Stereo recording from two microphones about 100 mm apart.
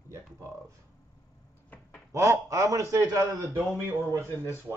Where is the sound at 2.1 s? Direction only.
30° right (ahead or behind).